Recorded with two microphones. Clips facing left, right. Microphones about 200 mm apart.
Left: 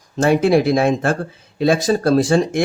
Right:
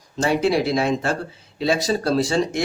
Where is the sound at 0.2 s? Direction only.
50° left (ahead or behind).